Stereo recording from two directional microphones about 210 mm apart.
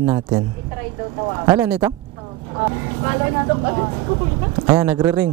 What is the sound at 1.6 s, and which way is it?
Speech, 5° right (ahead or behind).